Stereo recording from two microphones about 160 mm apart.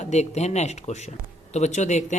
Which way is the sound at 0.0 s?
45° left (ahead or behind).